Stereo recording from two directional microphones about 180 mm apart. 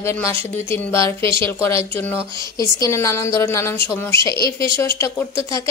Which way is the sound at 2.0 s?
10° left (ahead or behind).